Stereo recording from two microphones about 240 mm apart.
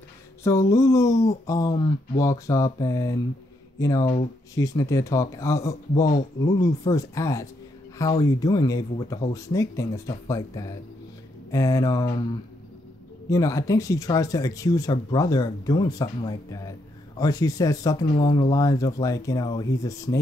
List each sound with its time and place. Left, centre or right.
0.4 s speech: centre
13.3 s speech: centre